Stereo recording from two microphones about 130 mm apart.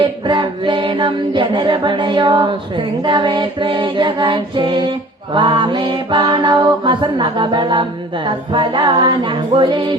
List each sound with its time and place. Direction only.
0.0 s mantra: 40° right (ahead or behind)